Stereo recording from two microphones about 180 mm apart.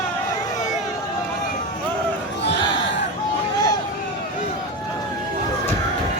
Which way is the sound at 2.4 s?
70° left (ahead or behind).